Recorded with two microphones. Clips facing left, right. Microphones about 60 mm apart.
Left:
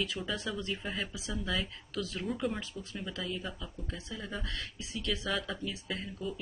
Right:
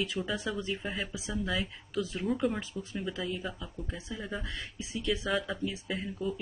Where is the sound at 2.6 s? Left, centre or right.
Right.